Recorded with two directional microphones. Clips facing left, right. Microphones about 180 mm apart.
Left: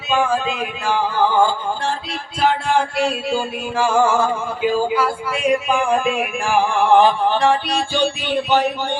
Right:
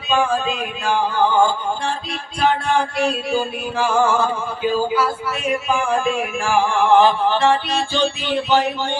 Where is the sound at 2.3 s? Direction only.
5° left (ahead or behind).